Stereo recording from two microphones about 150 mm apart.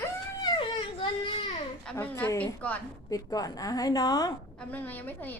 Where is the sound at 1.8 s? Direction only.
10° left (ahead or behind).